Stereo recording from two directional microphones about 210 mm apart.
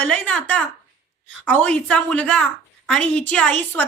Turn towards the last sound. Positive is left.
turn(degrees=5)  # may be behind; listen again after turning